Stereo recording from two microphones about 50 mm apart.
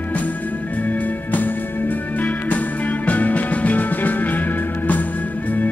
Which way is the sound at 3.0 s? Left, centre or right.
Left.